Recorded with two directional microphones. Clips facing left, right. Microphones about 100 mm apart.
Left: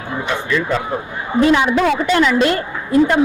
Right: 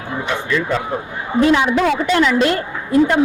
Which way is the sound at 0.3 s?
25° left (ahead or behind).